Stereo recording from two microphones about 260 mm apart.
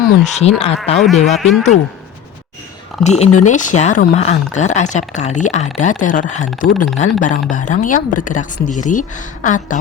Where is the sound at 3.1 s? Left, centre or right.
Left.